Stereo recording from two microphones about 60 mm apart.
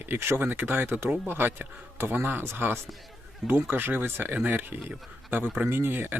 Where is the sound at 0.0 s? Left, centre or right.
Right.